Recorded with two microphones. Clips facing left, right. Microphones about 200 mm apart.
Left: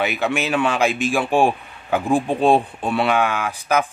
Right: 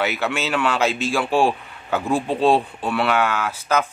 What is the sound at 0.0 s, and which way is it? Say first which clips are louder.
Speech: left 2 dB; 15° left (ahead or behind).